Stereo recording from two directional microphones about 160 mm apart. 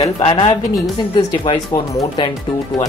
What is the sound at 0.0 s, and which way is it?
Speech, 35° left (ahead or behind).